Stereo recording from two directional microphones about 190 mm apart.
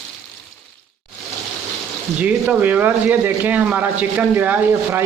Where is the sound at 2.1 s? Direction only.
5° right (ahead or behind).